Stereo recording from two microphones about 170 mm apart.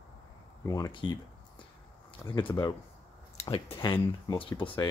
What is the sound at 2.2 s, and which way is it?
Speech, 25° left (ahead or behind).